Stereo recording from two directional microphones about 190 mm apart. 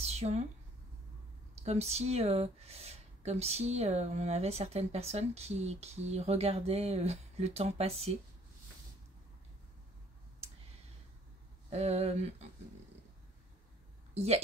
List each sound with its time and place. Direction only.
0.0 s a sound: 35° right (ahead or behind)
1.6 s speech: 35° right (ahead or behind)
11.7 s speech: 35° right (ahead or behind)
14.1 s speech: 35° right (ahead or behind)